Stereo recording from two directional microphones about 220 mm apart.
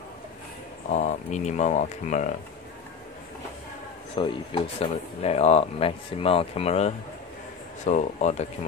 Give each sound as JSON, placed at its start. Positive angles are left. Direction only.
{"t": 0.8, "sound": "speech", "side_deg": 35}
{"t": 4.2, "sound": "speech", "side_deg": 20}